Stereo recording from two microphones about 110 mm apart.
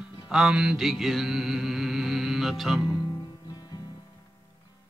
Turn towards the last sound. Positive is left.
turn(degrees=40)  # may be behind; listen again after turning